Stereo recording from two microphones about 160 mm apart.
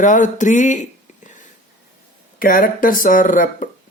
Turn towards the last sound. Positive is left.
turn(degrees=55)  # may be behind; listen again after turning